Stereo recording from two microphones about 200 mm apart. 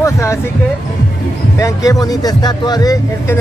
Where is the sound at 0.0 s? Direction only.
15° left (ahead or behind).